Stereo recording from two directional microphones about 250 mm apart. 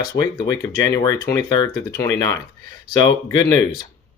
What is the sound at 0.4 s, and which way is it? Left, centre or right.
Speech, centre.